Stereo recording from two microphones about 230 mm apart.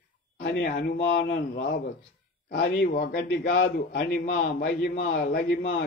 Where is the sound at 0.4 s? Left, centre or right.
Left.